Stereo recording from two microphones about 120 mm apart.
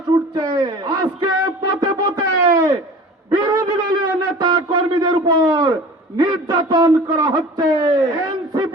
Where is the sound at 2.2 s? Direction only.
25° right (ahead or behind).